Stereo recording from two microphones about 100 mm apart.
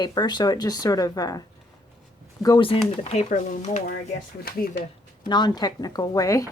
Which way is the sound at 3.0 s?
90° left.